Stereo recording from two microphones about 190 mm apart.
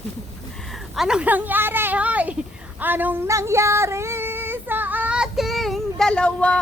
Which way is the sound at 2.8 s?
10° right (ahead or behind).